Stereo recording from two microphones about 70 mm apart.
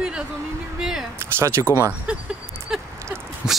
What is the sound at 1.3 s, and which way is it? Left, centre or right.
Speech, right.